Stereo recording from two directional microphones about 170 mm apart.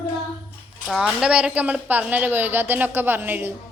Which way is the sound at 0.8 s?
5° right (ahead or behind).